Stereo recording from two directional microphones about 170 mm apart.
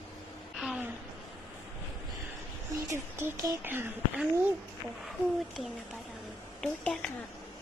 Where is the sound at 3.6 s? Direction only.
15° right (ahead or behind).